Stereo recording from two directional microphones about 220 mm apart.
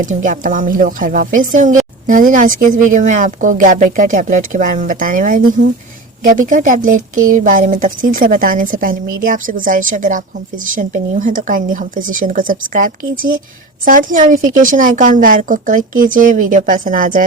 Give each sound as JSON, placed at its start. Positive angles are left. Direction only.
{"t": 0.0, "sound": "a woman's voice", "side_deg": -35}